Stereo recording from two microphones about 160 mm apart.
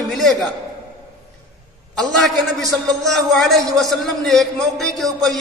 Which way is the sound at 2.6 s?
20° right (ahead or behind).